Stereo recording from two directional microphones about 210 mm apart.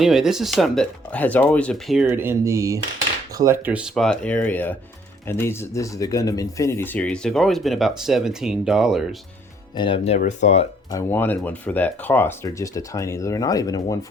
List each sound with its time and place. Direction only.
0.0 s speech: centre (ahead or behind)
2.0 s speech: 10° right (ahead or behind)
9.7 s speech: 25° left (ahead or behind)
10.9 s speech: 10° left (ahead or behind)